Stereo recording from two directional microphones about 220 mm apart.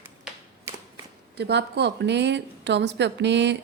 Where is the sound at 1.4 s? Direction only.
50° right (ahead or behind).